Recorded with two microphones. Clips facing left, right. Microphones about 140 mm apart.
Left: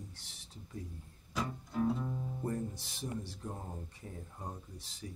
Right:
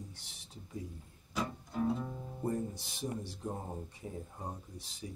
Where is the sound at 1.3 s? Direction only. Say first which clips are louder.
Even; 5° right (ahead or behind).